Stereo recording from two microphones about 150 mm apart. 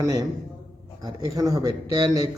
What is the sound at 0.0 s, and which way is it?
A man's voice, 25° right (ahead or behind).